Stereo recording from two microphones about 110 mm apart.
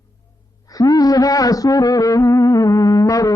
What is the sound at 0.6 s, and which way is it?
Music, 35° left (ahead or behind).